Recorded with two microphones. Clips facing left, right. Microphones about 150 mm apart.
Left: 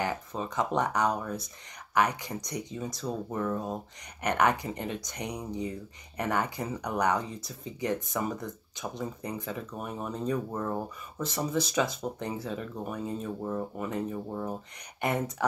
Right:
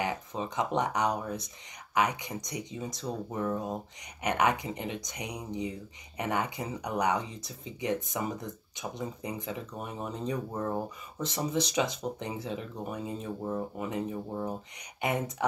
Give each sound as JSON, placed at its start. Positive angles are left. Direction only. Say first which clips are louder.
{"t": 0.0, "sound": "speech", "louder": "left 1 dB", "side_deg": -20}